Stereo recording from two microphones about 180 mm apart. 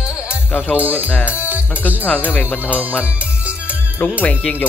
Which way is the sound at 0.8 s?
10° right (ahead or behind).